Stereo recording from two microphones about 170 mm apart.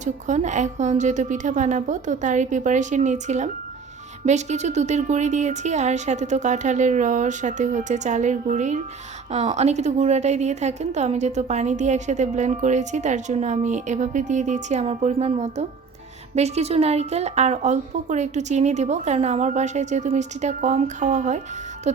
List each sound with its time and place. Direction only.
0.0 s a woman's voice: 45° right (ahead or behind)
21.9 s music: 40° right (ahead or behind)